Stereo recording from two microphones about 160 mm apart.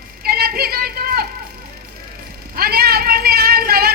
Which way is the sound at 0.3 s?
70° right (ahead or behind).